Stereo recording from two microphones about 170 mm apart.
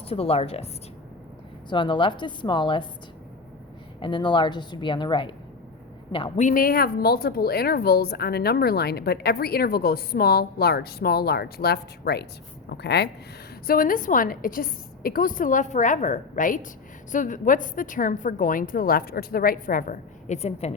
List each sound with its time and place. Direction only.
0.1 s a woman's voice: 35° left (ahead or behind)
1.7 s a woman's voice: 30° left (ahead or behind)
4.0 s a woman's voice: 25° left (ahead or behind)
6.4 s speech: 55° left (ahead or behind); by 13.1 s 75° left (ahead or behind)
13.7 s a woman's voice: 55° left (ahead or behind); by 20.7 s 40° left (ahead or behind)